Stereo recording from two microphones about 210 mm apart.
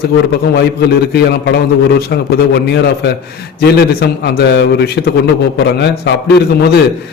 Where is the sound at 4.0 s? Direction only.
50° left (ahead or behind).